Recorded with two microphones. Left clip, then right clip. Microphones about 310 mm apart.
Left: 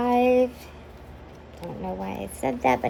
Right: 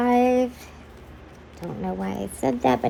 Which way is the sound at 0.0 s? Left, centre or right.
Right.